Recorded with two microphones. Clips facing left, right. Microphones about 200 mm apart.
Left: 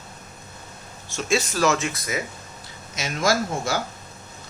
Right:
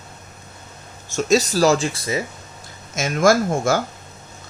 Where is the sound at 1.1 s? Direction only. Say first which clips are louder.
Right 6 dB; 40° right (ahead or behind).